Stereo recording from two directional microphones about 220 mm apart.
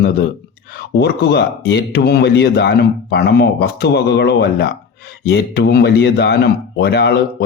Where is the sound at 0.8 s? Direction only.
50° left (ahead or behind).